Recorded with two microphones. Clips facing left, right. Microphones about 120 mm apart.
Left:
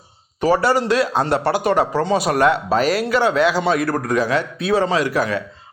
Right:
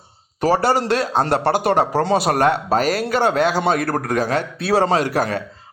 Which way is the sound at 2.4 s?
45° right (ahead or behind).